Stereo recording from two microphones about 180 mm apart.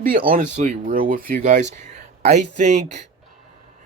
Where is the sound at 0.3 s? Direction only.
45° right (ahead or behind).